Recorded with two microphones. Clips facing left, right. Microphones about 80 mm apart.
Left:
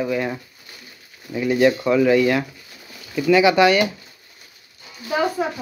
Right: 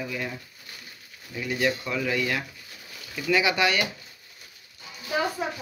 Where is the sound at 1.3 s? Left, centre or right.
Left.